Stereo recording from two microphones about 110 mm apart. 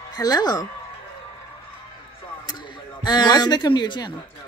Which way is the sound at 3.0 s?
40° left (ahead or behind).